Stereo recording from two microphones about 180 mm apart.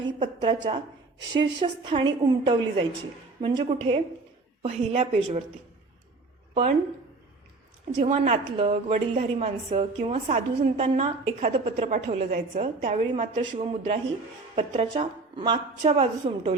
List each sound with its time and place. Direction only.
0.2 s a woman's voice: 25° right (ahead or behind)
6.5 s a woman's voice: 35° right (ahead or behind)
7.9 s a woman's voice: 35° right (ahead or behind)